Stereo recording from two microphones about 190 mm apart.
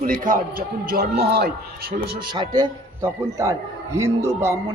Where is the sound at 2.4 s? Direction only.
20° right (ahead or behind).